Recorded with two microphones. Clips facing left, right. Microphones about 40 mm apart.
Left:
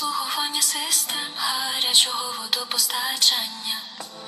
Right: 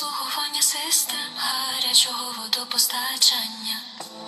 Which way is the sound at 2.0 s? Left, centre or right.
Centre.